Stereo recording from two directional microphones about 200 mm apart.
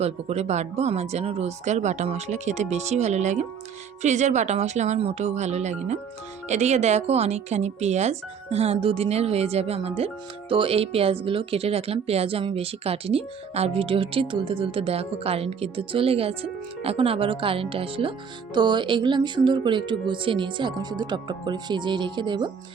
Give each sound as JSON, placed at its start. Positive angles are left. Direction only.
{"t": 0.0, "sound": "speech", "side_deg": -30}